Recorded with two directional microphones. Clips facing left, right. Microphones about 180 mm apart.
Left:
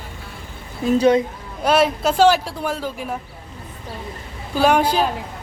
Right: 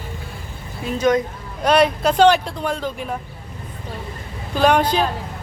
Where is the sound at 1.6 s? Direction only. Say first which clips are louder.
Right 1 dB; 5° left (ahead or behind).